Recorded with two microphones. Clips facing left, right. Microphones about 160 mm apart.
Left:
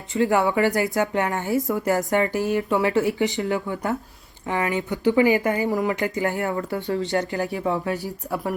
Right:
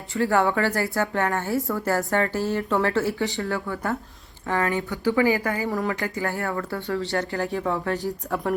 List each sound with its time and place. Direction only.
0.1 s speech: 20° left (ahead or behind)